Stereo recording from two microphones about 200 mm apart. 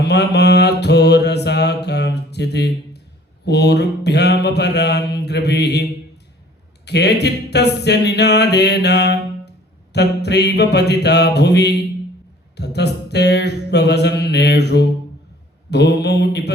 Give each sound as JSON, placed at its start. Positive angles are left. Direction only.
{"t": 0.0, "sound": "mantra", "side_deg": 55}
{"t": 6.8, "sound": "mantra", "side_deg": 55}